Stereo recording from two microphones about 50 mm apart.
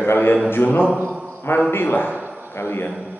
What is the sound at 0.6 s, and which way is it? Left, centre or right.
Mantra, left.